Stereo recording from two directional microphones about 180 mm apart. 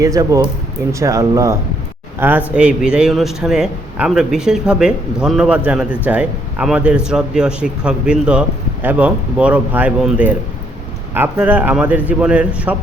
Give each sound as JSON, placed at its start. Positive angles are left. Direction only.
{"t": 0.0, "sound": "a man's voice", "side_deg": -20}